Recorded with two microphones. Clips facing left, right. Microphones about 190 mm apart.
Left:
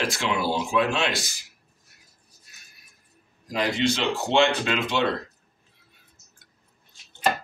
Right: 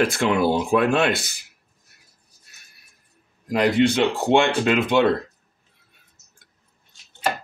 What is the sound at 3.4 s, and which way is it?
Speech, 60° right (ahead or behind).